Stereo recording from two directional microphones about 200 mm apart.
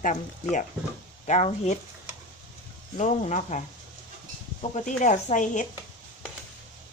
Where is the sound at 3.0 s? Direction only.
35° left (ahead or behind).